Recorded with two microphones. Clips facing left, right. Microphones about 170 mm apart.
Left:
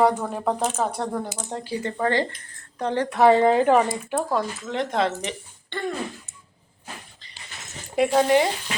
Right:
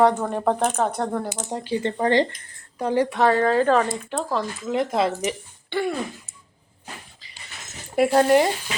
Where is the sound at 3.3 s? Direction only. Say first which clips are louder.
Left 1 dB; 20° left (ahead or behind).